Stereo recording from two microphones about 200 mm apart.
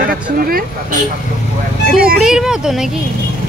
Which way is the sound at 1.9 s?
45° right (ahead or behind).